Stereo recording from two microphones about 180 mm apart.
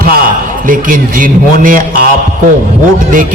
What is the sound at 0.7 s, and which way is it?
A man's voice, 50° right (ahead or behind).